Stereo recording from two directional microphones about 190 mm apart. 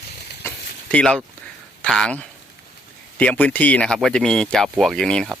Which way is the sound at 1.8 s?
5° left (ahead or behind).